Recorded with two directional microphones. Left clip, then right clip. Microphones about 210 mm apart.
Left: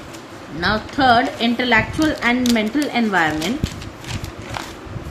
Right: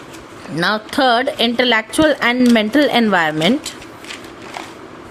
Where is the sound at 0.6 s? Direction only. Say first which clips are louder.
Right 2 dB; 50° right (ahead or behind).